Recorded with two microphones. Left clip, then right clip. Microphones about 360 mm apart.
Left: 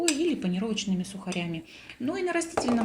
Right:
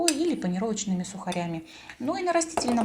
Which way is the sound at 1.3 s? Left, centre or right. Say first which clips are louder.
Right 1 dB; right.